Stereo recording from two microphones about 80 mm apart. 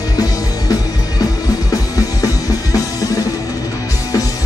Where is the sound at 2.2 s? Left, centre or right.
Left.